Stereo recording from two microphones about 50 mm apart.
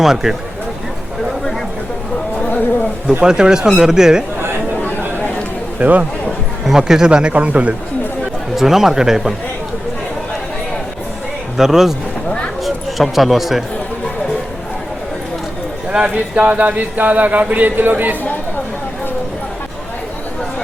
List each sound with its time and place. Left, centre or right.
0.0 s speech: centre
3.2 s speech: centre
5.8 s speech: right
6.7 s speech: centre
7.3 s speech: right
8.5 s speech: centre
11.5 s speech: centre
15.9 s speech: centre
16.1 s speech: right
17.7 s speech: right